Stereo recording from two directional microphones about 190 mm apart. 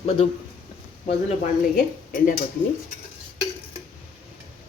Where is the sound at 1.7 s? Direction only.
50° left (ahead or behind).